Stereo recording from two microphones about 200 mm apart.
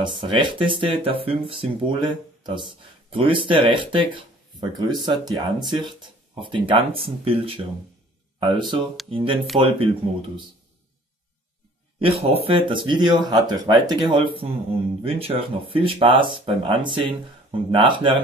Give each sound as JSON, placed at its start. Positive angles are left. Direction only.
{"t": 0.0, "sound": "speech", "side_deg": -25}
{"t": 12.0, "sound": "speech", "side_deg": -30}